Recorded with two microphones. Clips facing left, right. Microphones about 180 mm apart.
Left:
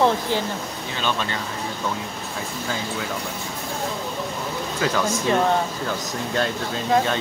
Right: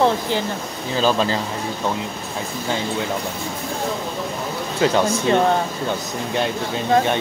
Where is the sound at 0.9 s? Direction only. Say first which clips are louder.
Right 8 dB; 35° right (ahead or behind).